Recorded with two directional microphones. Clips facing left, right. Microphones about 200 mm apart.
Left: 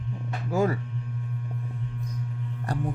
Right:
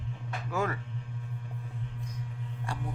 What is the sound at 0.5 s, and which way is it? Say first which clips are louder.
Speech: left 7 dB; 35° left (ahead or behind).